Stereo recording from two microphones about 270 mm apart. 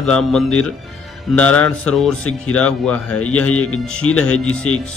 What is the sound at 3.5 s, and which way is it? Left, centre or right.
Speech, left.